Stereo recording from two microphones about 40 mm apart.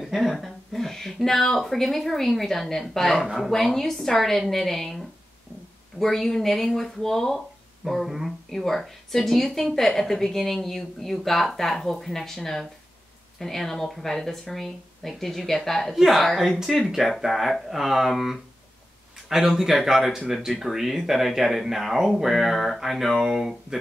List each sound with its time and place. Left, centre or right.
0.0 s speech: centre